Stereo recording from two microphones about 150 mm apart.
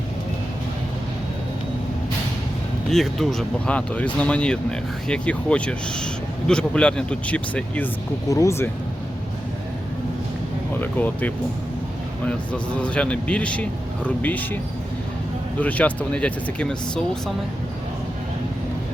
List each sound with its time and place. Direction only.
2.9 s speech: centre (ahead or behind)
8.3 s speech: 20° left (ahead or behind)
10.8 s speech: 10° left (ahead or behind)